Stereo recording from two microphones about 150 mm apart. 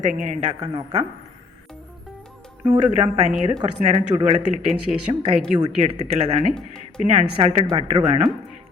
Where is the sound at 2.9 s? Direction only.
45° right (ahead or behind).